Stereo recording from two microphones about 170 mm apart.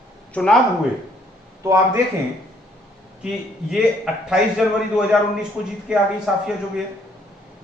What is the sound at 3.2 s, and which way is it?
A man's voice, 5° right (ahead or behind).